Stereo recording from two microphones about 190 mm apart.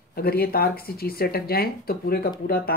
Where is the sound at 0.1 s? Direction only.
55° left (ahead or behind).